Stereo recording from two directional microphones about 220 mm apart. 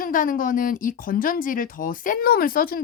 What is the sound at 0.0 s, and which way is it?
Speech, 40° left (ahead or behind).